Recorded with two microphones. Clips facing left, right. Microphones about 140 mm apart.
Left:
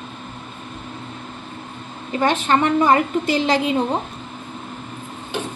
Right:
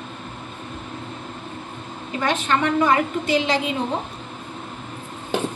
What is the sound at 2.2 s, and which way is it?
A woman's voice, 35° left (ahead or behind).